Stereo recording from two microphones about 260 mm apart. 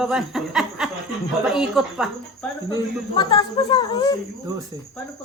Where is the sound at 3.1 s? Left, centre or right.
Centre.